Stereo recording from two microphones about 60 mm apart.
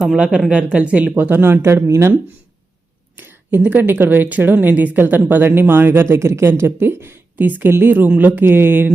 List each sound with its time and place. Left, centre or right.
0.0 s speech: centre; by 2.1 s right
3.2 s speech: right